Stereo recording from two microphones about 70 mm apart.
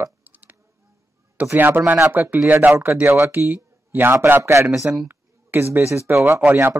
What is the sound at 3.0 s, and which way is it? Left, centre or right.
Speech, right.